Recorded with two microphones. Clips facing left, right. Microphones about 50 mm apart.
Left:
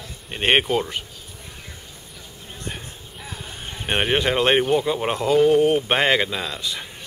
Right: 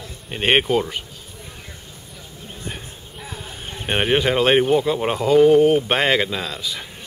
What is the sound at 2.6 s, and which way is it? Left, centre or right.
Speech, centre.